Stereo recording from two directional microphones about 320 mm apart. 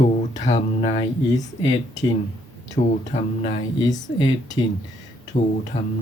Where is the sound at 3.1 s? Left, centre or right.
Centre.